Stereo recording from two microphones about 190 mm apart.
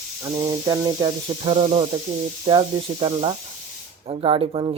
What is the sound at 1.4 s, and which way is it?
Speech, 35° right (ahead or behind).